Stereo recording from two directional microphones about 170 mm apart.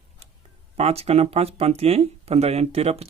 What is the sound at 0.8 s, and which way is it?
Speech, 35° right (ahead or behind).